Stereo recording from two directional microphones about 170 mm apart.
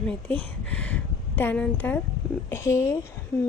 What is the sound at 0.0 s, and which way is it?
A woman's voice, 5° left (ahead or behind).